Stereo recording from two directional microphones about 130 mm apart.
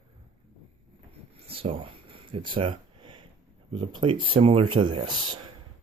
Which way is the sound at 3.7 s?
40° right (ahead or behind).